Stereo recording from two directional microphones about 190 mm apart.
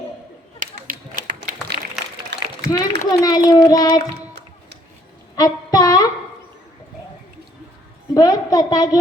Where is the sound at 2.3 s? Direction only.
65° right (ahead or behind).